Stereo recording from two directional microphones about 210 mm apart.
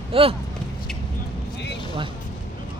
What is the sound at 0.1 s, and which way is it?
Speech, 25° right (ahead or behind).